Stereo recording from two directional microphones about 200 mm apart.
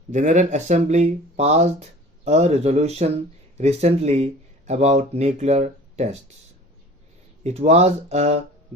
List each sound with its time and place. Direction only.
0.1 s speech: 35° right (ahead or behind)
7.4 s speech: 35° right (ahead or behind)